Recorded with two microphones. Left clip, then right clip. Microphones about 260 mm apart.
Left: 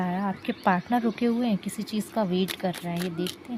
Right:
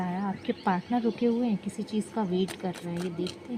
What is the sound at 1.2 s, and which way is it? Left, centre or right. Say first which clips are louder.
Speech: left 1 dB; left.